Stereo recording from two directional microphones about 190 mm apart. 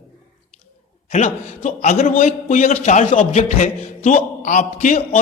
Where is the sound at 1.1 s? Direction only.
35° left (ahead or behind).